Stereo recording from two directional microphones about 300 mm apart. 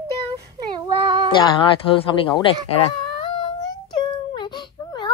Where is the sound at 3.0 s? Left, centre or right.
Centre.